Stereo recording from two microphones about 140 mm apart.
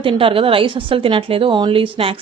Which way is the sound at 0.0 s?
40° right (ahead or behind).